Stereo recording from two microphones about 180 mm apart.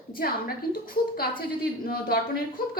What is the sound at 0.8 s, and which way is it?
Speech, 55° left (ahead or behind).